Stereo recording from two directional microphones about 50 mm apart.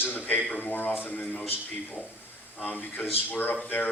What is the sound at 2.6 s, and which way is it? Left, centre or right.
Speech, left.